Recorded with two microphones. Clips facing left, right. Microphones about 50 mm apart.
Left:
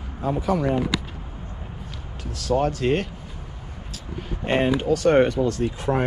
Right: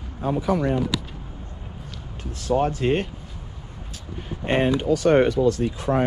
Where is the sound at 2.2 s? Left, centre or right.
Right.